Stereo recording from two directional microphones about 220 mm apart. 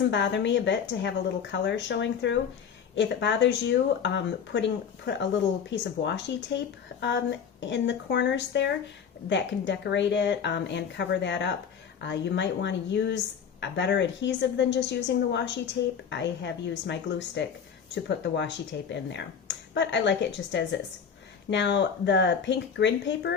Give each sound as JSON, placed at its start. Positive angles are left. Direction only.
{"t": 0.1, "sound": "a woman's voice", "side_deg": 55}